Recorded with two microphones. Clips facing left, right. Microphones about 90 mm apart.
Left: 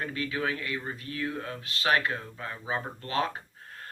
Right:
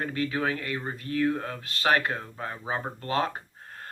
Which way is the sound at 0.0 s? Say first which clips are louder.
Right 3 dB; 40° right (ahead or behind).